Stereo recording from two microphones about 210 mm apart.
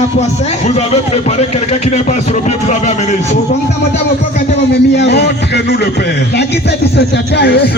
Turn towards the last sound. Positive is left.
turn(degrees=50)  # may be behind; listen again after turning